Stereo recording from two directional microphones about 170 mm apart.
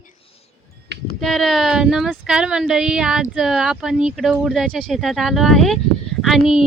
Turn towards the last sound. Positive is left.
turn(degrees=0)  # may be behind; listen again after turning